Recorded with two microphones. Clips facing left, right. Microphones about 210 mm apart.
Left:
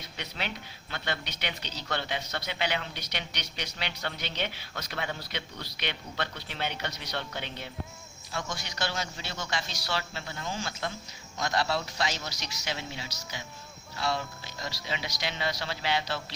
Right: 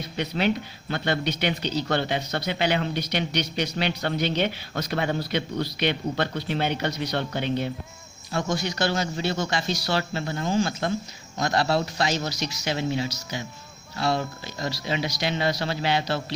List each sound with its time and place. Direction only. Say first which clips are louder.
0.2 s speech: right 13 dB; 45° right (ahead or behind)